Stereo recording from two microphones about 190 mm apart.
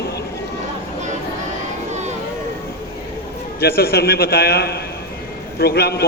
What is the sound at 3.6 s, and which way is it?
A man's voice, 55° left (ahead or behind).